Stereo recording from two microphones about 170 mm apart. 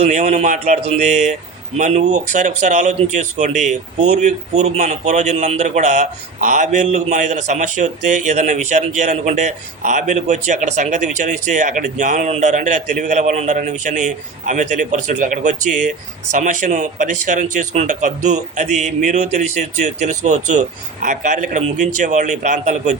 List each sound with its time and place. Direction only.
0.0 s speech: 45° right (ahead or behind)